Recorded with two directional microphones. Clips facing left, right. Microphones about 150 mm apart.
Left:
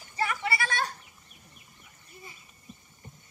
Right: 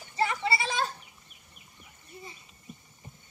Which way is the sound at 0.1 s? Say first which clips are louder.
Right 2 dB; 25° right (ahead or behind).